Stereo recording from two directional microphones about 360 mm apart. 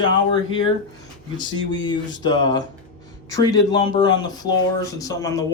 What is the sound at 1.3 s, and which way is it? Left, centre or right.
A man's voice, centre.